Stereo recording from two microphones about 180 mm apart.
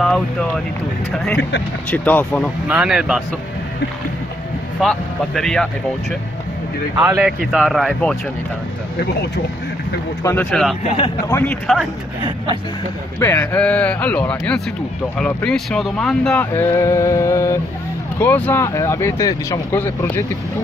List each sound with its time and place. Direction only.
0.0 s speech: 5° left (ahead or behind)
2.7 s speech: 5° right (ahead or behind)
4.7 s speech: centre (ahead or behind)
7.2 s speech: centre (ahead or behind)
10.2 s speech: 5° left (ahead or behind)
13.2 s speech: 10° left (ahead or behind)
16.5 s speech: 15° left (ahead or behind)